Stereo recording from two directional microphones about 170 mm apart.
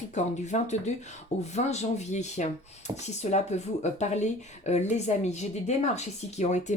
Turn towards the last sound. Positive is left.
turn(degrees=40)  # may be behind; listen again after turning